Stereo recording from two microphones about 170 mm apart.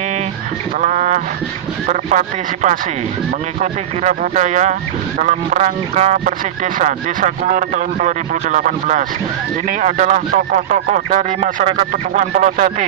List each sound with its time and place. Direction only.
0.7 s speech: 45° right (ahead or behind)
4.0 s speech: 45° right (ahead or behind)